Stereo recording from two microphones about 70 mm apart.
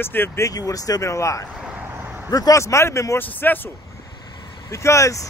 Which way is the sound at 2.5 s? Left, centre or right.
Left.